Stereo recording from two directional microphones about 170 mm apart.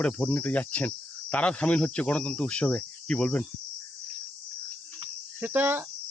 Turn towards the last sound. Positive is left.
turn(degrees=-10)  # may be behind; listen again after turning